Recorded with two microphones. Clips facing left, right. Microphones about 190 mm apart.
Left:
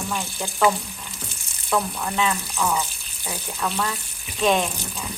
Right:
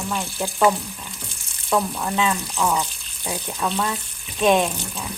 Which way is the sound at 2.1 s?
20° right (ahead or behind).